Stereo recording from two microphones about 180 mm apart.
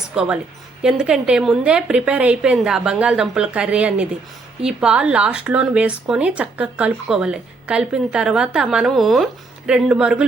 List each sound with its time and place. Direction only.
0.1 s a woman's voice: 5° right (ahead or behind)